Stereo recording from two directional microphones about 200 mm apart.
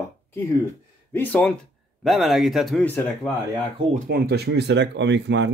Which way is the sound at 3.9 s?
45° right (ahead or behind).